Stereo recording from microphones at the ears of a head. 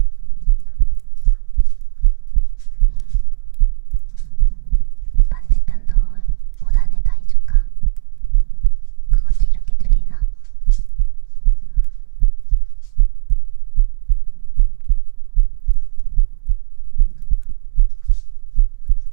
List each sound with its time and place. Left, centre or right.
0.0 s heart sounds: right